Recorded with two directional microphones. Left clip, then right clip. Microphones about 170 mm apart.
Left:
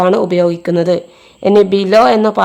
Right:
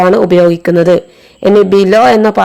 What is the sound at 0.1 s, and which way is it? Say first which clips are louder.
Speech: right 5 dB; 20° right (ahead or behind).